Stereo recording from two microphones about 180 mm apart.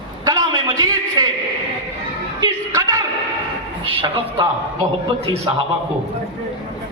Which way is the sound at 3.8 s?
30° right (ahead or behind).